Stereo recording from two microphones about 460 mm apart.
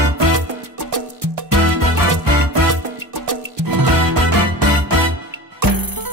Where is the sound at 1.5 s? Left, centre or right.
Right.